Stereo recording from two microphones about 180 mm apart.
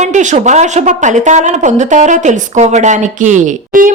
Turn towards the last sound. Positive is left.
turn(degrees=-45)  # may be behind; listen again after turning